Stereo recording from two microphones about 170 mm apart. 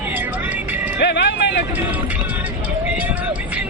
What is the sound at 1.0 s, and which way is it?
Music, 85° left.